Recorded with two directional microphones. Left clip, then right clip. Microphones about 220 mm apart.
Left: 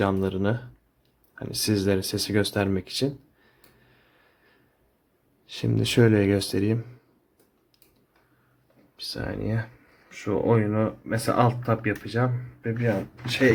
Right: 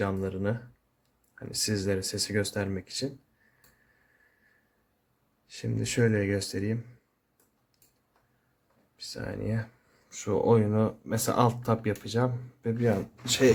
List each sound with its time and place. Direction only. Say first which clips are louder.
0.0 s speech: left 6 dB; 20° left (ahead or behind)
5.5 s speech: left 7 dB; 30° left (ahead or behind)
6.0 s speech: left 6 dB; 20° left (ahead or behind)
9.1 s speech: left 3 dB; 5° left (ahead or behind)